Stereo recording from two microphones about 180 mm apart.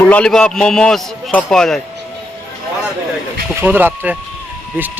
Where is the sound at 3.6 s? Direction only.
10° right (ahead or behind).